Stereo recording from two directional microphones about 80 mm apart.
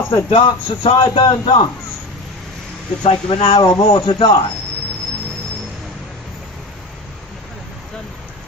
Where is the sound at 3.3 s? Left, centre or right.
Left.